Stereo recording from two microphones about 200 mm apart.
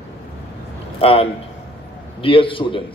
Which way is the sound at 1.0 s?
30° left (ahead or behind).